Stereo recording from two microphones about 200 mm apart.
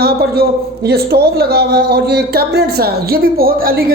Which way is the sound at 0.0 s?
50° right (ahead or behind).